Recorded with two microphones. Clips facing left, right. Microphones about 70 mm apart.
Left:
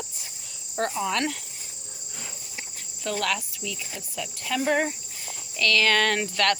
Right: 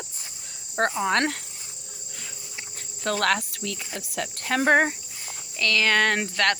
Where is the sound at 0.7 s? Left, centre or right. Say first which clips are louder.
Right 3 dB; right.